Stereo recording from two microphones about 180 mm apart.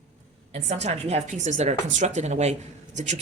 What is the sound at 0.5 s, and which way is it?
A woman's voice, 40° right (ahead or behind).